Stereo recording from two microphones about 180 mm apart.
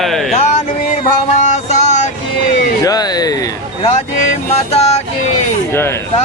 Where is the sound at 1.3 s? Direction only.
40° left (ahead or behind).